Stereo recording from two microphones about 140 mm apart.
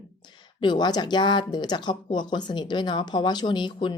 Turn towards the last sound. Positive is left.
turn(degrees=35)  # may be behind; listen again after turning